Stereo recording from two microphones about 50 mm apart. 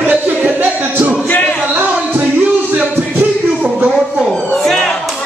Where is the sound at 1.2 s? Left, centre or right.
Left.